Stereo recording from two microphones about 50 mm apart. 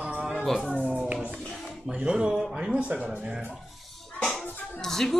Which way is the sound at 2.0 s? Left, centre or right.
Centre.